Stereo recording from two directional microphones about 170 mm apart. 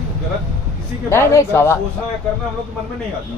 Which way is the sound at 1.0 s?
15° left (ahead or behind).